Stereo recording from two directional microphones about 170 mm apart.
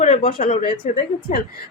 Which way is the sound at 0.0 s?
45° left (ahead or behind).